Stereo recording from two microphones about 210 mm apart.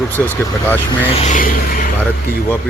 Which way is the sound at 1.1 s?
35° left (ahead or behind).